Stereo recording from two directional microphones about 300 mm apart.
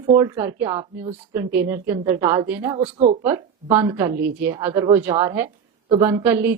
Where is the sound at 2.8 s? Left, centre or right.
Right.